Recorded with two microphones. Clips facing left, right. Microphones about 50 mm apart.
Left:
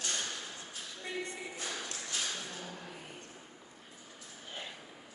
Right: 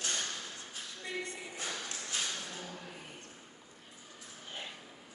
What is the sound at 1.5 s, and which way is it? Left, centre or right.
Music, centre.